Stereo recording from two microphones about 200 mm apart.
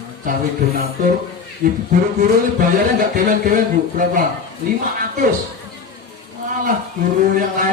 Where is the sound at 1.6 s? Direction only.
45° right (ahead or behind).